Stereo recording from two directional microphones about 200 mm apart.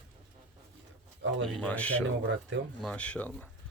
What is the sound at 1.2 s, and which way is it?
Speech, 65° right (ahead or behind).